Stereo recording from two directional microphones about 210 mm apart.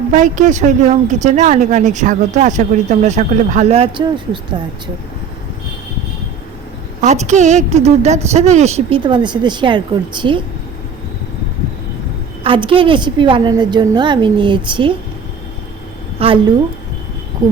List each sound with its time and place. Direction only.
0.1 s speech: 35° right (ahead or behind)
7.0 s speech: 35° right (ahead or behind)
12.4 s a woman's voice: 25° right (ahead or behind)
16.1 s a woman's voice: 25° right (ahead or behind)